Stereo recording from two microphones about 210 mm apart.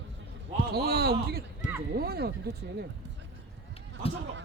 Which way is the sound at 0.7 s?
50° right (ahead or behind).